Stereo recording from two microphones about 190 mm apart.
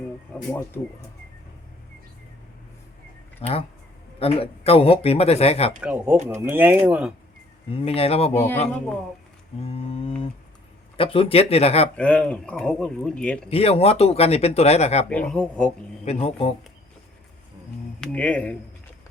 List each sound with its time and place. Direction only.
0.3 s speech: 10° left (ahead or behind)
3.4 s a man's voice: 30° left (ahead or behind)
5.8 s speech: 5° right (ahead or behind)
7.7 s a man's voice: 30° left (ahead or behind)
8.3 s speech: 10° left (ahead or behind)
9.6 s a man's voice: 30° left (ahead or behind)
11.9 s speech: 5° left (ahead or behind)
13.5 s a man's voice: 30° left (ahead or behind)
15.1 s speech: 5° left (ahead or behind)
16.0 s a man's voice: 30° left (ahead or behind)
18.0 s speech: 5° left (ahead or behind)